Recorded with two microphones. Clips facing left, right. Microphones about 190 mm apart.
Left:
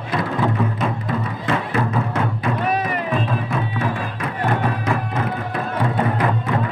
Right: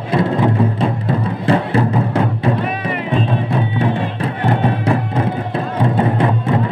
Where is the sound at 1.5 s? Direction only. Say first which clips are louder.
Right 6 dB; 30° right (ahead or behind).